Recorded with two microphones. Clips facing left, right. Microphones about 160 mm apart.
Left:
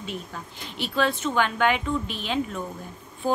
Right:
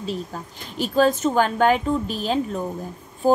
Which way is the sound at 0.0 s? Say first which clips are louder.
Right 6 dB; 35° right (ahead or behind).